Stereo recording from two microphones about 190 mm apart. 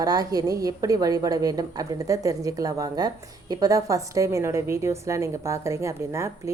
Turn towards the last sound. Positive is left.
turn(degrees=-15)  # may be behind; listen again after turning